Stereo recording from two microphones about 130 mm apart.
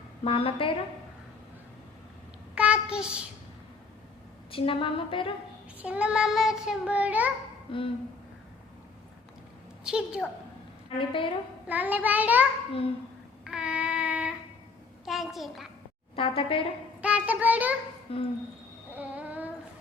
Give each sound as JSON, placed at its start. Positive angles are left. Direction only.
{"t": 0.3, "sound": "a woman's voice", "side_deg": 45}
{"t": 2.6, "sound": "child singing", "side_deg": -10}
{"t": 4.5, "sound": "a woman's voice", "side_deg": 45}
{"t": 5.8, "sound": "child singing", "side_deg": -10}
{"t": 7.7, "sound": "a woman's voice", "side_deg": 45}
{"t": 9.8, "sound": "a woman's voice", "side_deg": -5}
{"t": 10.8, "sound": "a woman's voice", "side_deg": 40}
{"t": 11.7, "sound": "child singing", "side_deg": -10}
{"t": 13.4, "sound": "a sound", "side_deg": -5}
{"t": 15.0, "sound": "a child's voice", "side_deg": 0}
{"t": 16.1, "sound": "a woman's voice", "side_deg": 45}
{"t": 17.0, "sound": "child singing", "side_deg": -10}
{"t": 18.1, "sound": "a woman's voice", "side_deg": 45}
{"t": 18.9, "sound": "child singing", "side_deg": -10}